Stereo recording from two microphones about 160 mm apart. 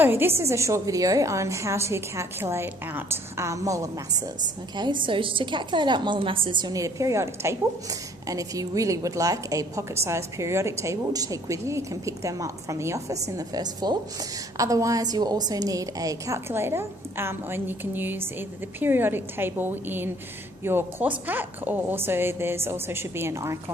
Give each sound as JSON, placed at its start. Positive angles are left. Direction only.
{"t": 0.0, "sound": "a woman's voice", "side_deg": -15}